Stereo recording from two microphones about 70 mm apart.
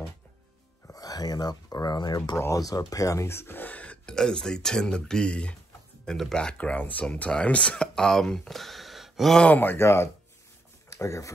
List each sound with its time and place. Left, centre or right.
0.9 s speech: left
2.3 s speech: left; by 9.4 s centre
9.4 s speech: left
10.9 s speech: left